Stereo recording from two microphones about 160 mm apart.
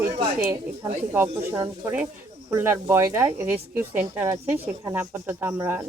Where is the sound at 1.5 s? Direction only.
15° right (ahead or behind).